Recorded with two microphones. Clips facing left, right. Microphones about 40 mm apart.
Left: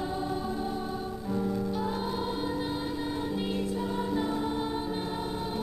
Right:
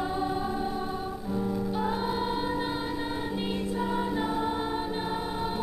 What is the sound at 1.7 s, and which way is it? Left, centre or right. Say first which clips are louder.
Music: right 2 dB; right.